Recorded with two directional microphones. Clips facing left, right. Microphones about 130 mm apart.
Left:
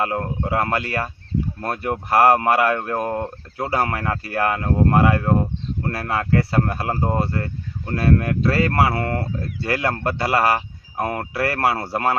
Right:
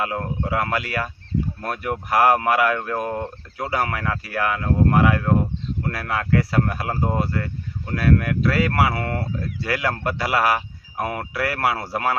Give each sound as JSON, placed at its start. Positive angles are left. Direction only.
{"t": 0.0, "sound": "speech", "side_deg": 30}